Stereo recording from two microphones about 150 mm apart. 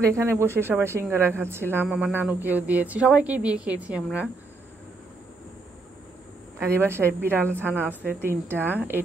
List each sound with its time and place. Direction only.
0.0 s a woman's voice: 15° right (ahead or behind)
6.6 s a woman's voice: 15° right (ahead or behind)